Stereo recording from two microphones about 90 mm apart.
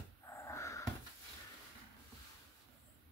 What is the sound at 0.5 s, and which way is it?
Wheeze, 35° left (ahead or behind).